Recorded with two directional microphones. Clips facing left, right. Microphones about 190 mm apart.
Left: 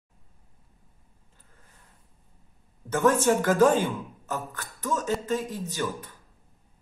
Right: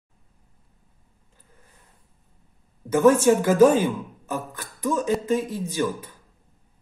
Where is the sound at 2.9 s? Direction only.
10° right (ahead or behind).